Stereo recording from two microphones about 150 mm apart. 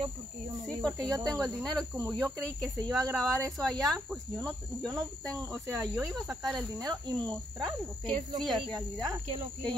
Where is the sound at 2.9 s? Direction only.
20° right (ahead or behind).